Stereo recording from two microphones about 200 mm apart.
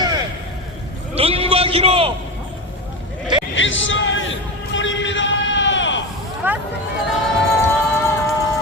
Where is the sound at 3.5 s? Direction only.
70° left (ahead or behind).